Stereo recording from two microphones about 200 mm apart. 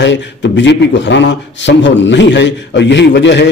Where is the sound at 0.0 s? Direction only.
60° left (ahead or behind).